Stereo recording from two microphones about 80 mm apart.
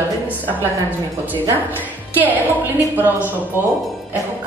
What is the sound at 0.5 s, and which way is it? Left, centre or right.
A woman's voice, right.